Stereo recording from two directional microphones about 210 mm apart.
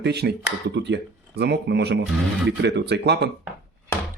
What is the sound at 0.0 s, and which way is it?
Speech, 50° right (ahead or behind).